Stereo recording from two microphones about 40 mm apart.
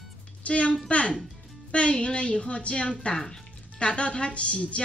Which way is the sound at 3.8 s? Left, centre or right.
Left.